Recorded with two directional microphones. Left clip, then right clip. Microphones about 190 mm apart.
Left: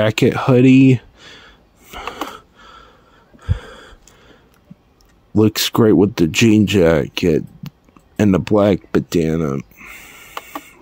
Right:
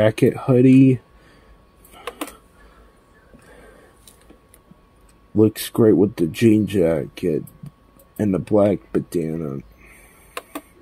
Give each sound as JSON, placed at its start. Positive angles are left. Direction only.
{"t": 0.0, "sound": "speech", "side_deg": 30}
{"t": 1.9, "sound": "a sound", "side_deg": 40}
{"t": 5.4, "sound": "speech", "side_deg": 35}